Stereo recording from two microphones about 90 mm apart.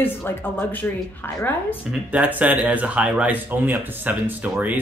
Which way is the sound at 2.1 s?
20° right (ahead or behind).